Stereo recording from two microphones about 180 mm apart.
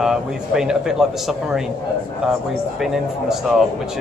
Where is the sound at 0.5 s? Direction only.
5° right (ahead or behind).